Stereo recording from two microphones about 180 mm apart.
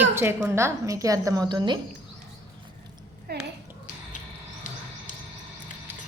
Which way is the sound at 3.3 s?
60° right (ahead or behind).